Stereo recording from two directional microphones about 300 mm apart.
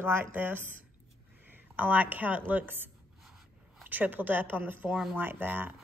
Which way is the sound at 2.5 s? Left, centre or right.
Centre.